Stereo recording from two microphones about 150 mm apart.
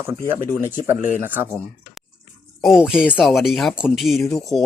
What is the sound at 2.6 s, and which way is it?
Speech, centre (ahead or behind).